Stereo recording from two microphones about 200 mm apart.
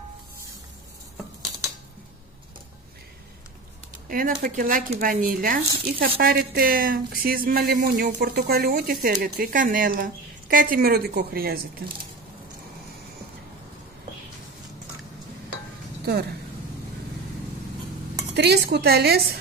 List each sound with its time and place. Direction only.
4.1 s speech: 45° right (ahead or behind)
18.3 s speech: 55° right (ahead or behind)